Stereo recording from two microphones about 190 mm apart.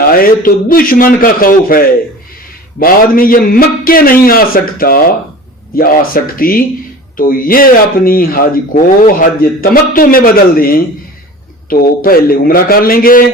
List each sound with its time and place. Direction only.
0.1 s speech: 50° left (ahead or behind)